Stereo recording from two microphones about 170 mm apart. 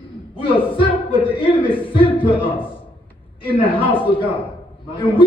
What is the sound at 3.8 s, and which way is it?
A man's voice, 30° left (ahead or behind).